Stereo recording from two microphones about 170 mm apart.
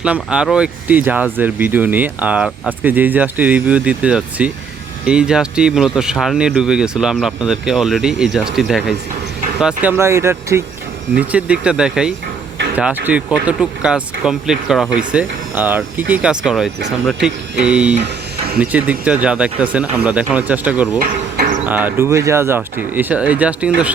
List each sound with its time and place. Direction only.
0.0 s speech: 5° right (ahead or behind)
10.0 s speech: 15° right (ahead or behind)
18.0 s electric shaver: 65° right (ahead or behind)
18.6 s speech: 10° right (ahead or behind)